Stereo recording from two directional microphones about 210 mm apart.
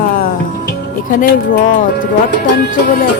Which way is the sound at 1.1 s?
40° left (ahead or behind).